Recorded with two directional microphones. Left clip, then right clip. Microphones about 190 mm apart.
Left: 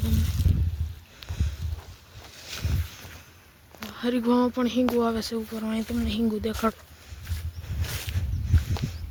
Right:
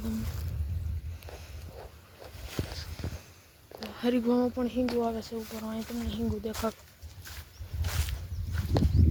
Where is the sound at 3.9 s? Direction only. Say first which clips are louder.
Left 1 dB; centre (ahead or behind).